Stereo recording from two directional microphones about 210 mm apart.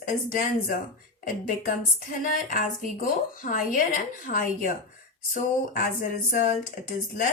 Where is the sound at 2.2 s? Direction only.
40° left (ahead or behind).